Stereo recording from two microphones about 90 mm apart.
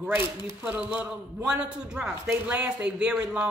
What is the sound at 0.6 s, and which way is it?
A man's voice, 20° right (ahead or behind).